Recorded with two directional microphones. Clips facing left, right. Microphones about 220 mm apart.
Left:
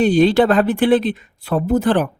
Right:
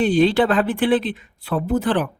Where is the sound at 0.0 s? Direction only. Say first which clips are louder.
Left 3 dB; 40° left (ahead or behind).